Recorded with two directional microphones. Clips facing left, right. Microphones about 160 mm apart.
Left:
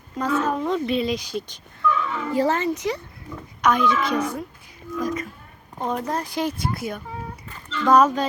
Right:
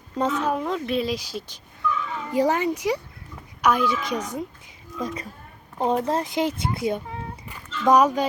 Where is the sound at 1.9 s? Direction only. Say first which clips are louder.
Left 4 dB; 70° left (ahead or behind).